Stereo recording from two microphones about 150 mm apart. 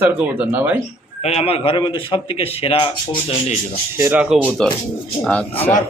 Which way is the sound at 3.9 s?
15° right (ahead or behind).